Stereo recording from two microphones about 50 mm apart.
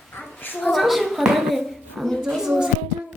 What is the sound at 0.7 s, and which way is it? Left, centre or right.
A woman's voice, centre.